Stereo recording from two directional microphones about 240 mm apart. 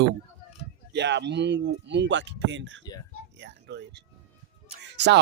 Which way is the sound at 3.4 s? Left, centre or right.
Right.